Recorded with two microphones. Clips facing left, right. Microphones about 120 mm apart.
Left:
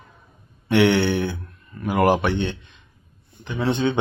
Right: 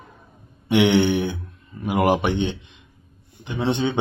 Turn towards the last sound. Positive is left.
turn(degrees=-20)  # may be behind; listen again after turning